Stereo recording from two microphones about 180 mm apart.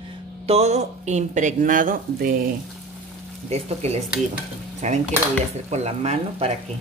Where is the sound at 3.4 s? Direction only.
35° right (ahead or behind).